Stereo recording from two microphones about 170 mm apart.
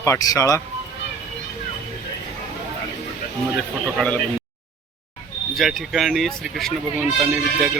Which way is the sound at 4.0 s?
Centre (ahead or behind).